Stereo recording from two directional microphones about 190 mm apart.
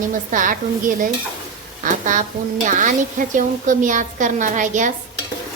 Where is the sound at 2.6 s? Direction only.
40° right (ahead or behind).